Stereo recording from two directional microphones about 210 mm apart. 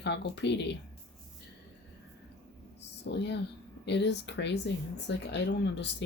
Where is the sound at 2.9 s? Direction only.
55° left (ahead or behind).